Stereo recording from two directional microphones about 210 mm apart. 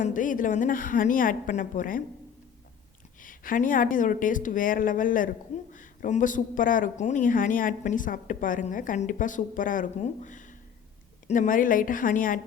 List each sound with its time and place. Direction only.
0.0 s speech: 40° left (ahead or behind)
3.2 s speech: 40° left (ahead or behind)